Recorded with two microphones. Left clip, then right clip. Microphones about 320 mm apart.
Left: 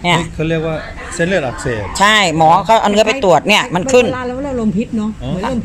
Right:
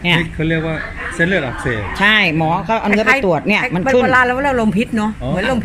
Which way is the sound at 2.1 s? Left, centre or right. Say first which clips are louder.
Left 4 dB; left.